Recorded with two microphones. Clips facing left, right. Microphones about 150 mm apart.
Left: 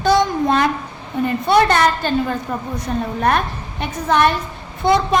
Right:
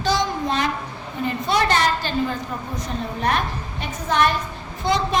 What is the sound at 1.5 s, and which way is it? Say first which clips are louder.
Speech: left 6 dB; 55° left (ahead or behind).